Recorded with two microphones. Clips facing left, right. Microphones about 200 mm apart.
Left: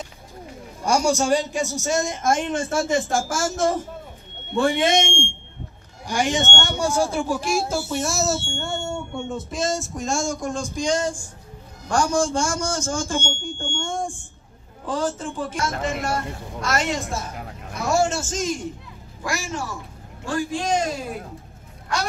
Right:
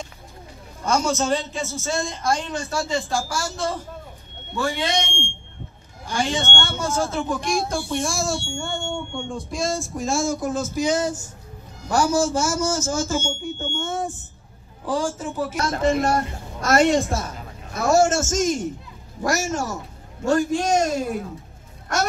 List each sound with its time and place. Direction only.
0.8 s a man's voice: 10° left (ahead or behind)
4.6 s a man's voice: 25° left (ahead or behind); by 15.5 s 10° right (ahead or behind)
15.6 s a woman's voice: 35° right (ahead or behind)